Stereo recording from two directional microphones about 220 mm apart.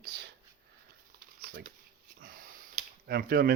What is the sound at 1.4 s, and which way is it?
Shuffling cards, 40° right (ahead or behind).